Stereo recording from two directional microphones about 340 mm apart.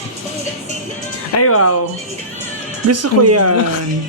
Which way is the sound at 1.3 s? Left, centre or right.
Left.